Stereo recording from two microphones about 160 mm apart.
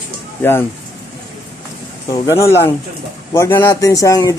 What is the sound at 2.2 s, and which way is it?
Speech, 15° left (ahead or behind).